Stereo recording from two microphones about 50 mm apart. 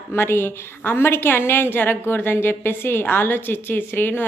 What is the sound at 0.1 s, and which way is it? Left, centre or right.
A woman's voice, left.